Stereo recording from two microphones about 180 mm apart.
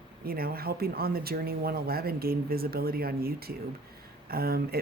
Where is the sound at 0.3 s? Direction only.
55° right (ahead or behind).